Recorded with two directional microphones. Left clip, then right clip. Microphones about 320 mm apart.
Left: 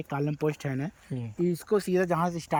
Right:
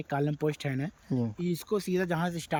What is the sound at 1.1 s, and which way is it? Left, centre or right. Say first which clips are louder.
Speech: left 3 dB; right.